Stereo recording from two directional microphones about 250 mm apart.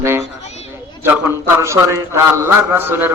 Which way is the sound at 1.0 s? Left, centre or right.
Centre.